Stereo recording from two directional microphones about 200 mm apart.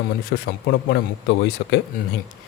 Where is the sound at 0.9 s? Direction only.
55° left (ahead or behind).